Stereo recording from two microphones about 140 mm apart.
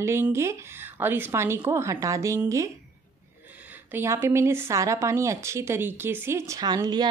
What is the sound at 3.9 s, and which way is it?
Speech, 20° right (ahead or behind).